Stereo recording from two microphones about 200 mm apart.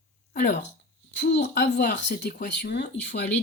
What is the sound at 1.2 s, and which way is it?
Speech, 55° left (ahead or behind).